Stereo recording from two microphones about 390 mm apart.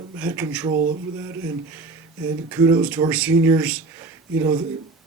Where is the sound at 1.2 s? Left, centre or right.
Centre.